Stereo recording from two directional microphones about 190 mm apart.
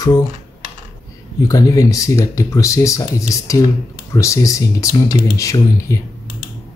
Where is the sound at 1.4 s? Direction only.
15° left (ahead or behind).